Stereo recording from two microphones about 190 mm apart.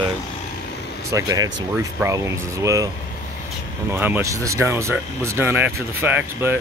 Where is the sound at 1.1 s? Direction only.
20° right (ahead or behind).